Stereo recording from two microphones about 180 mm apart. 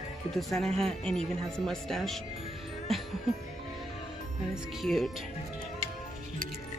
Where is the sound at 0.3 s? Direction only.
Centre (ahead or behind).